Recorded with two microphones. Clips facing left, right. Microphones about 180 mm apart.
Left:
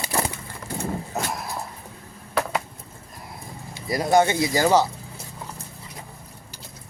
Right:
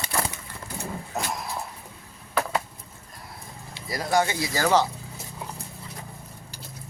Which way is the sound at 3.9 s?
25° left (ahead or behind).